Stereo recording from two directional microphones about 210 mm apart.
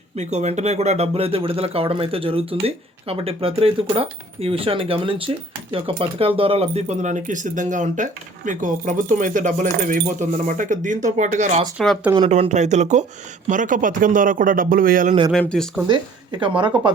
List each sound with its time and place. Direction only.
0.2 s speech: 30° right (ahead or behind)
11.8 s speech: centre (ahead or behind)
12.1 s speech: 25° right (ahead or behind); by 15.1 s 40° right (ahead or behind)
15.3 s speech: 5° left (ahead or behind)
16.4 s speech: 25° right (ahead or behind)